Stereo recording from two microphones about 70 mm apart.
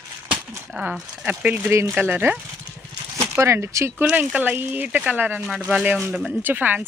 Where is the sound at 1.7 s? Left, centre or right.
Right.